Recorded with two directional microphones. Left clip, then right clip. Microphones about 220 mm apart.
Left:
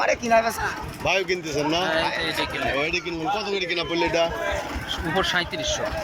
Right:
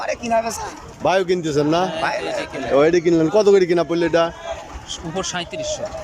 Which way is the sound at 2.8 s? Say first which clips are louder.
Right 11 dB; 40° right (ahead or behind).